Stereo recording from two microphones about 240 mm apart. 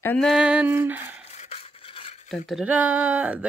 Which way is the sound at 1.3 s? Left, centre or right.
Left.